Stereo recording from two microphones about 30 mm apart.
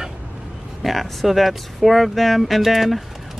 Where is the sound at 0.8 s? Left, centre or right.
Centre.